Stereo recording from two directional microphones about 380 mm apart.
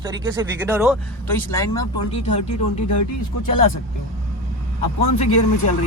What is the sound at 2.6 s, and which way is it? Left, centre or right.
Speech, left.